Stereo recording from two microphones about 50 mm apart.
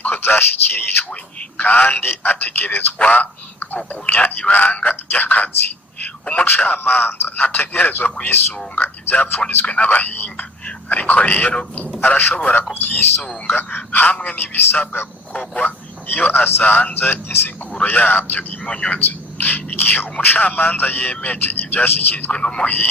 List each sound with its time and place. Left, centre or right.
0.0 s a man's voice: left
3.0 s a sound: left
4.0 s a man's voice: left
6.7 s a man's voice: left
12.3 s speech: left
12.7 s a man's voice: left
14.1 s speech: left
14.3 s speech: left
16.0 s a man's voice: left
17.7 s a man's voice: left
18.6 s speech: left
18.9 s a man's voice: left
22.3 s speech: centre